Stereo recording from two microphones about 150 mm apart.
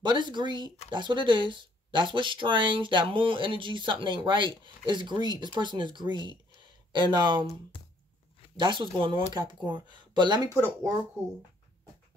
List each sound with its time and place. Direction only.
0.0 s speech: 30° right (ahead or behind)
7.7 s a sound: 35° left (ahead or behind)
8.5 s speech: 30° right (ahead or behind)
10.5 s speech: 20° right (ahead or behind)